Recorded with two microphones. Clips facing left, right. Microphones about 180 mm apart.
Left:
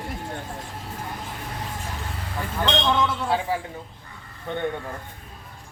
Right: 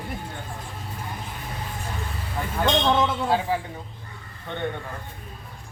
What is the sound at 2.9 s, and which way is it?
Speech, 20° right (ahead or behind).